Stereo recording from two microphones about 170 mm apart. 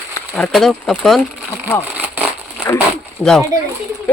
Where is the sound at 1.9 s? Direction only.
10° right (ahead or behind).